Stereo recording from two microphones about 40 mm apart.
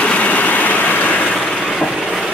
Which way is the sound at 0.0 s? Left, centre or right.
Left.